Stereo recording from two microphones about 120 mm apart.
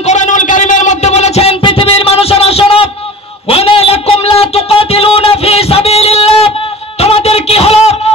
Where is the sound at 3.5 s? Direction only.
55° left (ahead or behind).